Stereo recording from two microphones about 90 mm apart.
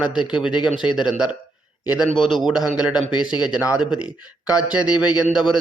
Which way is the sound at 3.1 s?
55° left (ahead or behind).